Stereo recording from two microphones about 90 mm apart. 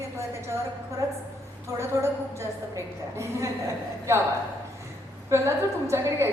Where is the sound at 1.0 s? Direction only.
35° right (ahead or behind).